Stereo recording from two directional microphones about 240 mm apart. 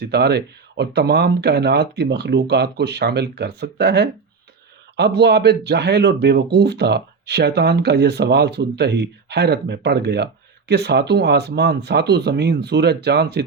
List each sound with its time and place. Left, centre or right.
0.0 s speech: right